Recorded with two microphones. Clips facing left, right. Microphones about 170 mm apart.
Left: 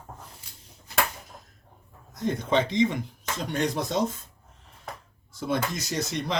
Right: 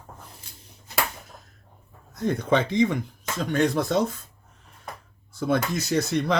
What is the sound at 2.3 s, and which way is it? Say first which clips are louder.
Speech: right 2 dB; 55° right (ahead or behind).